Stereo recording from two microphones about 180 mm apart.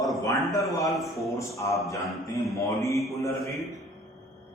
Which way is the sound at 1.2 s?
15° left (ahead or behind).